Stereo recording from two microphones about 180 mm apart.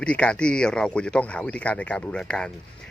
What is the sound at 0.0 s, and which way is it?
Speech, 5° left (ahead or behind).